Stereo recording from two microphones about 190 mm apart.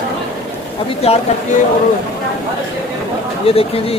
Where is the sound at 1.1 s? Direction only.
30° left (ahead or behind).